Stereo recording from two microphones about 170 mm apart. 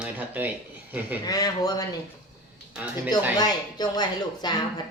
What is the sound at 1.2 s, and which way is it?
Speech, 20° left (ahead or behind).